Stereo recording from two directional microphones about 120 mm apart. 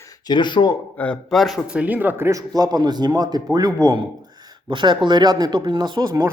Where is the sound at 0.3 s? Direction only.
40° left (ahead or behind).